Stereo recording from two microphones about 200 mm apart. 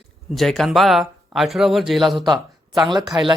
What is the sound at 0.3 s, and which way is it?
Speech, centre (ahead or behind).